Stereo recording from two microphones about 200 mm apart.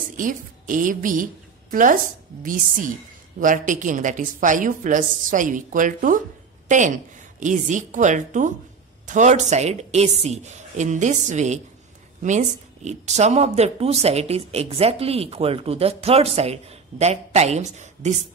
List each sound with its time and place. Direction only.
0.2 s a woman's voice: 40° right (ahead or behind)